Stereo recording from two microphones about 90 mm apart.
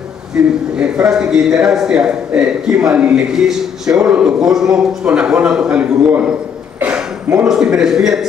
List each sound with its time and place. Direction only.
0.3 s a man's voice: 10° right (ahead or behind)
6.8 s a sound: 15° right (ahead or behind)
7.4 s a man's voice: 5° right (ahead or behind)